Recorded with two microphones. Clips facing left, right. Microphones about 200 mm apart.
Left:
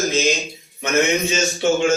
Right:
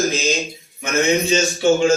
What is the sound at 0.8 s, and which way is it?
Speech, 30° right (ahead or behind).